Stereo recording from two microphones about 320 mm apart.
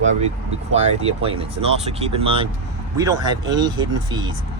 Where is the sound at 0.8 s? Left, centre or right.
Centre.